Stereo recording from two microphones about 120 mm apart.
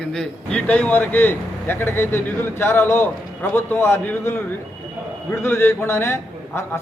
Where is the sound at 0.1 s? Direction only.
5° left (ahead or behind).